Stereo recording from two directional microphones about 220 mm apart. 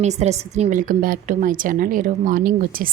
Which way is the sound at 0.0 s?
30° right (ahead or behind).